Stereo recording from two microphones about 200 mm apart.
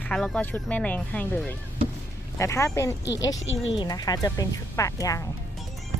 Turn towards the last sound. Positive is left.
turn(degrees=15)  # may be behind; listen again after turning